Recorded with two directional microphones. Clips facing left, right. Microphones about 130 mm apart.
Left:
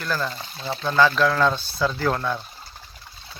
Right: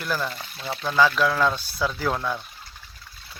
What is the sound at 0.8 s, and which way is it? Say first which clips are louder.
Speech: left 2 dB; 5° right (ahead or behind).